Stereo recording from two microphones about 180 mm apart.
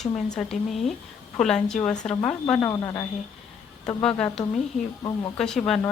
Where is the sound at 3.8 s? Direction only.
5° left (ahead or behind).